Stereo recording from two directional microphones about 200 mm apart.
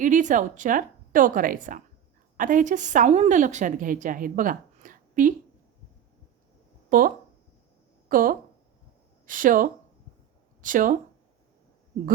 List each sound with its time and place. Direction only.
0.0 s a woman's voice: 40° right (ahead or behind)
6.9 s a woman's voice: 40° right (ahead or behind)
8.1 s speech: 45° right (ahead or behind)